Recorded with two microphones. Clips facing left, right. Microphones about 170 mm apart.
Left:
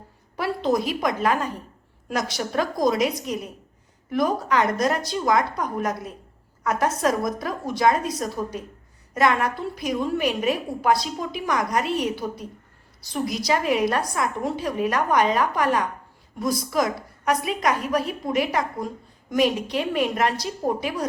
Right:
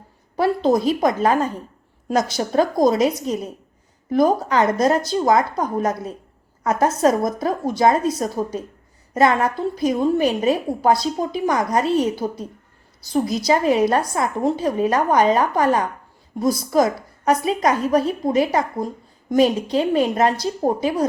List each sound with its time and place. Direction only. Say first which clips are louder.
0.3 s a woman's voice: right 5 dB; 30° right (ahead or behind)